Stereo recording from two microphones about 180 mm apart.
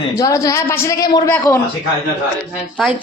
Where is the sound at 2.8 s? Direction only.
Centre (ahead or behind).